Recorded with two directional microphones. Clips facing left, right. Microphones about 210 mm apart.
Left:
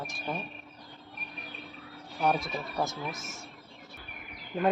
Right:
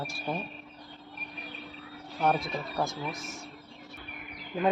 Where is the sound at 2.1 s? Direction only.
Centre (ahead or behind).